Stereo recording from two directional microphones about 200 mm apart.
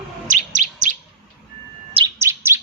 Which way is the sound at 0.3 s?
40° right (ahead or behind).